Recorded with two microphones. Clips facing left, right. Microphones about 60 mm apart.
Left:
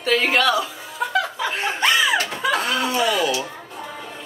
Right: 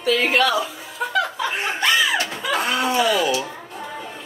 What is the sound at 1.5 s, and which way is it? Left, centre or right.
Speech, centre.